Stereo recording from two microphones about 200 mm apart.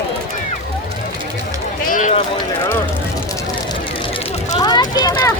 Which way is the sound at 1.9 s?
40° left (ahead or behind).